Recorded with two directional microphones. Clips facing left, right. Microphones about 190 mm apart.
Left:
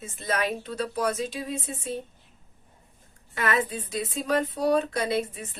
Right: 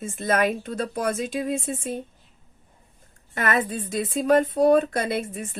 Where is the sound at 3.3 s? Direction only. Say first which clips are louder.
Right 2 dB; 50° right (ahead or behind).